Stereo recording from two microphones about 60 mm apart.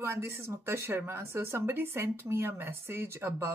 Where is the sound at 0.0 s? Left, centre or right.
Right.